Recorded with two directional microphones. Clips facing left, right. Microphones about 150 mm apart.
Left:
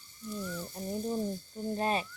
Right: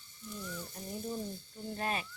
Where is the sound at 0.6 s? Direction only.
35° left (ahead or behind).